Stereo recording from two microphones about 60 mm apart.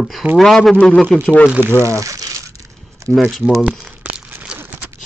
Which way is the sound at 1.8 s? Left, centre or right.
Right.